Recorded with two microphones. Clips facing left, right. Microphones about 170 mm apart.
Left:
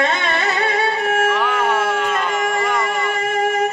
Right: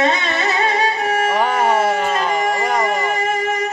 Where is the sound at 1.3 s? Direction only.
40° right (ahead or behind).